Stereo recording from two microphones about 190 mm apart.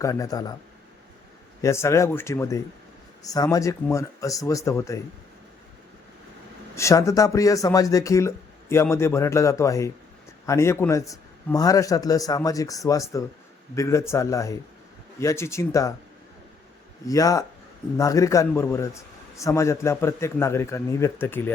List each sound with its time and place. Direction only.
0.0 s speech: 15° left (ahead or behind)
1.6 s a man's voice: 15° left (ahead or behind)
6.7 s a man's voice: 15° left (ahead or behind)
17.1 s a man's voice: 15° left (ahead or behind)